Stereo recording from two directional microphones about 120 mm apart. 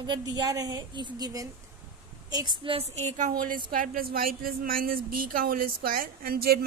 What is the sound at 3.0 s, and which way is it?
Speech, 75° right (ahead or behind).